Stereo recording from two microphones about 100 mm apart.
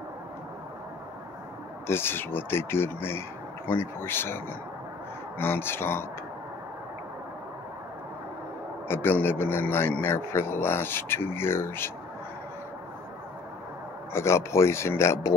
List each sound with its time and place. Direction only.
1.9 s a man's voice: 25° left (ahead or behind)
5.4 s a man's voice: 25° left (ahead or behind)
8.8 s a man's voice: 20° left (ahead or behind)
14.1 s a man's voice: 25° left (ahead or behind)